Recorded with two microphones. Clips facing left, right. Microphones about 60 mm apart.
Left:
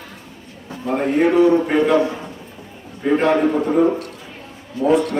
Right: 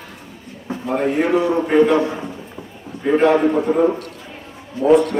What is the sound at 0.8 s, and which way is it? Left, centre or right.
A man's voice, centre.